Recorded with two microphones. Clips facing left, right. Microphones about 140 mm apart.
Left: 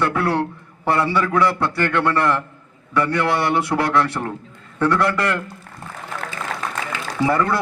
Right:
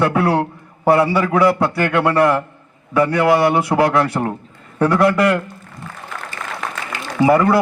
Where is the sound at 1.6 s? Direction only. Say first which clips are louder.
Right 3 dB; 10° right (ahead or behind).